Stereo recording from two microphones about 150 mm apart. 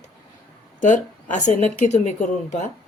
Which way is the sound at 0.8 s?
55° left (ahead or behind).